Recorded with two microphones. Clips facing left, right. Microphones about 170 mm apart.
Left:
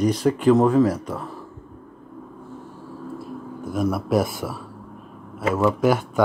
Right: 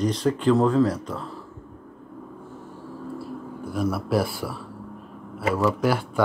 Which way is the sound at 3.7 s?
20° left (ahead or behind).